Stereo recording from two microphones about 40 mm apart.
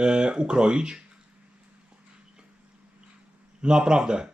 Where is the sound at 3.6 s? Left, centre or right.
Right.